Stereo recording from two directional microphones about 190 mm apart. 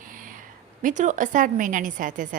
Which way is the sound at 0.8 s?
40° right (ahead or behind).